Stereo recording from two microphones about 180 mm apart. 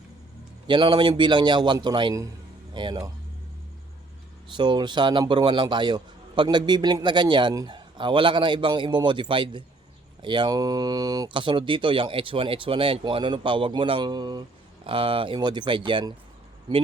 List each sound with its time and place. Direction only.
0.7 s a man's voice: 25° right (ahead or behind)
4.5 s a man's voice: 25° right (ahead or behind)